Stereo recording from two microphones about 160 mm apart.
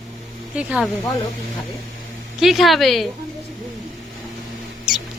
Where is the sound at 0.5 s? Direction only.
5° right (ahead or behind).